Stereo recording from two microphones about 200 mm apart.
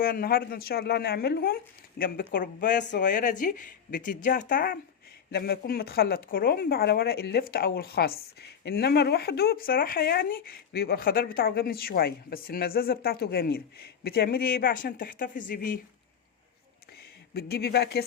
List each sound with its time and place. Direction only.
0.0 s speech: 50° left (ahead or behind)
17.3 s speech: 50° left (ahead or behind)